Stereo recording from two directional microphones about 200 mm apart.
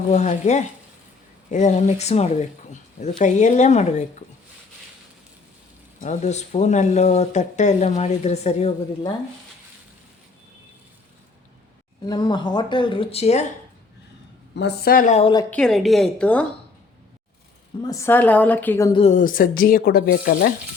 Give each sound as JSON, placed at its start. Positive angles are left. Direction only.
{"t": 0.1, "sound": "speech", "side_deg": 35}
{"t": 6.0, "sound": "speech", "side_deg": 35}
{"t": 12.0, "sound": "speech", "side_deg": 20}
{"t": 14.5, "sound": "speech", "side_deg": 55}
{"t": 15.4, "sound": "a woman's voice", "side_deg": 5}
{"t": 17.8, "sound": "a woman's voice", "side_deg": 15}
{"t": 18.9, "sound": "speech", "side_deg": 30}
{"t": 19.2, "sound": "speech", "side_deg": 45}